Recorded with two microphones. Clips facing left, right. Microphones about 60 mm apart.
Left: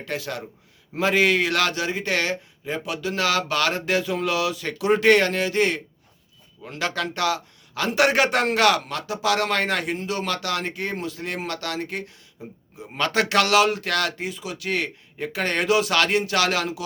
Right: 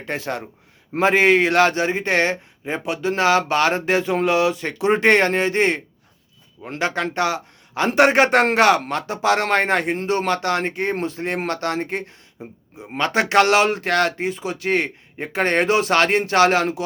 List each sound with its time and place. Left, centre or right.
0.0 s a man's voice: right